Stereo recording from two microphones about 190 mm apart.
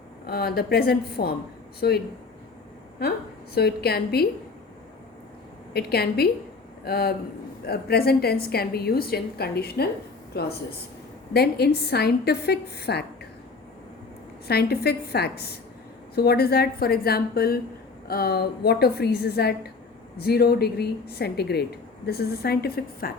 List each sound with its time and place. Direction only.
0.3 s a woman's voice: 55° left (ahead or behind)
3.5 s a woman's voice: 55° left (ahead or behind)
5.7 s a woman's voice: 55° left (ahead or behind)
14.4 s a woman's voice: 55° left (ahead or behind)